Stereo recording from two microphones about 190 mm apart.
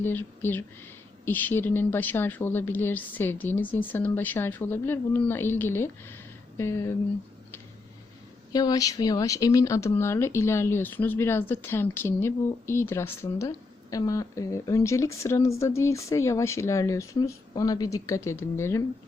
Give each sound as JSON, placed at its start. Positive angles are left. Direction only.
{"t": 0.0, "sound": "a woman's voice", "side_deg": 10}
{"t": 8.5, "sound": "a woman's voice", "side_deg": 20}